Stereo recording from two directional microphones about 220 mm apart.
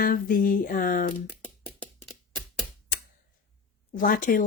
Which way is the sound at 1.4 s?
5° left (ahead or behind).